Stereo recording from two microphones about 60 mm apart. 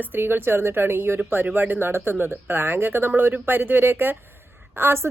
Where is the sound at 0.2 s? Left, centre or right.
Right.